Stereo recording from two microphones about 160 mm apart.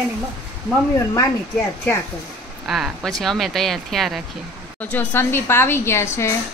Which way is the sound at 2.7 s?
Centre (ahead or behind).